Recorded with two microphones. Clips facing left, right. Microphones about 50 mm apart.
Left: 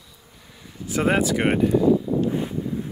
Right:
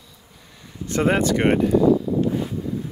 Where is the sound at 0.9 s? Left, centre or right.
Centre.